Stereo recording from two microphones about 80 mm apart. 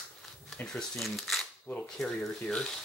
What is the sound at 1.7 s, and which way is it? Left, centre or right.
Speech, centre.